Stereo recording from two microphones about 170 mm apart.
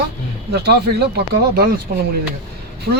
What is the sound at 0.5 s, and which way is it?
Speech, 70° right (ahead or behind).